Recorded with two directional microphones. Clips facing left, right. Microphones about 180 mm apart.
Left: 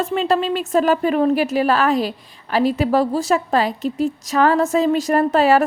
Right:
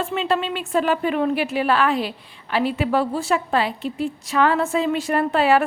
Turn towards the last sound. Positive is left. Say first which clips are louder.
# left 3 dB
turn(degrees=40)  # may be behind; listen again after turning